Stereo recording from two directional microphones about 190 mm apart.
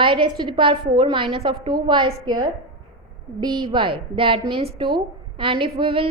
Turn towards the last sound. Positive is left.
turn(degrees=-30)  # may be behind; listen again after turning